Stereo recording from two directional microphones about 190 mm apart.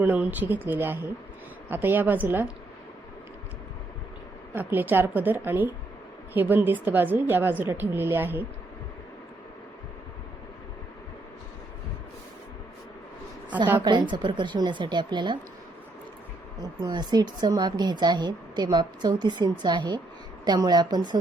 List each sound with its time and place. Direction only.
0.0 s a woman's voice: 10° right (ahead or behind)
4.5 s a woman's voice: 10° right (ahead or behind)
13.8 s a woman's voice: 25° right (ahead or behind)
16.8 s a woman's voice: 20° right (ahead or behind)